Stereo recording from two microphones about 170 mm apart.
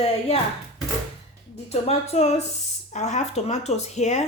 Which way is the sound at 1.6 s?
40° left (ahead or behind).